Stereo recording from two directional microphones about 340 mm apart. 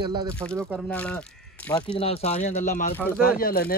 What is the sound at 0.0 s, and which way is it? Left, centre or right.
Speech, centre.